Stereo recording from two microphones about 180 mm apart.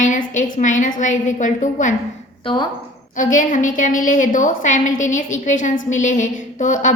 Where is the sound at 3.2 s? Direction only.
45° left (ahead or behind).